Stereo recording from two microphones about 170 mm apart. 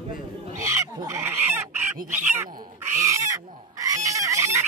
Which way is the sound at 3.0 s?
20° right (ahead or behind).